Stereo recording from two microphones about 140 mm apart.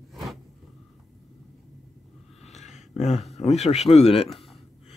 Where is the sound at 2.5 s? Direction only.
55° left (ahead or behind).